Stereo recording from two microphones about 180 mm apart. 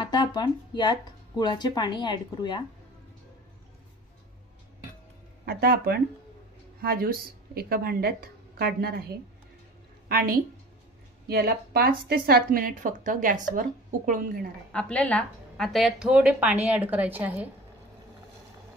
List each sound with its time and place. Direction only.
0.0 s speech: 25° left (ahead or behind)
5.4 s a woman's voice: 55° right (ahead or behind)
14.7 s speech: 5° left (ahead or behind)